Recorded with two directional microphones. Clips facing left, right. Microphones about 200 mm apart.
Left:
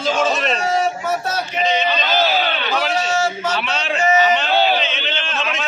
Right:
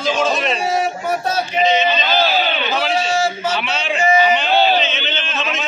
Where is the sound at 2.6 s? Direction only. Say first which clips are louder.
Right 1 dB; 10° right (ahead or behind).